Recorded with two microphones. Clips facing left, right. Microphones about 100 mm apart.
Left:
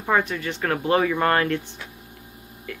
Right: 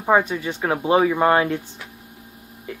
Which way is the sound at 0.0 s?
15° right (ahead or behind).